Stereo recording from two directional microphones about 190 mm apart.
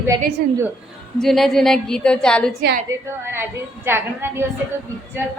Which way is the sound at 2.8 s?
10° right (ahead or behind).